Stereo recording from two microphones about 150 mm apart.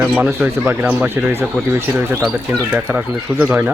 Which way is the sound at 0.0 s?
5° right (ahead or behind).